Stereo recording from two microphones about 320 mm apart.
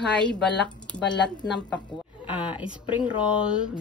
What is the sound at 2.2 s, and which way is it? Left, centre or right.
Speech, centre.